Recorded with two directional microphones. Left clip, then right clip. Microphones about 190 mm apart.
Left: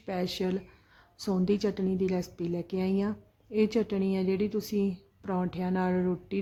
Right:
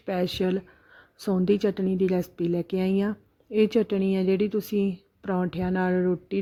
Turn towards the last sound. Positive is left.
turn(degrees=-25)  # may be behind; listen again after turning